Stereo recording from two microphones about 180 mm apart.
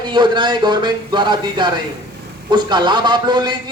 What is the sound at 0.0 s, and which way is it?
A man's voice, 25° right (ahead or behind).